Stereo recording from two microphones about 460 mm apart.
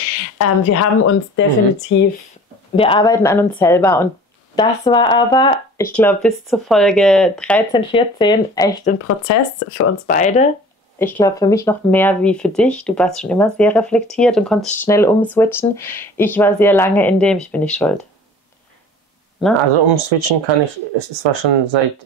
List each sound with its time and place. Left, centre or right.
0.4 s speech: left
2.7 s speech: centre
8.9 s speech: left
9.8 s speech: centre
19.7 s speech: right
21.2 s speech: right